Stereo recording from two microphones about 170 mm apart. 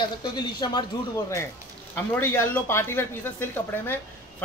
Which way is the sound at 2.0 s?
10° left (ahead or behind).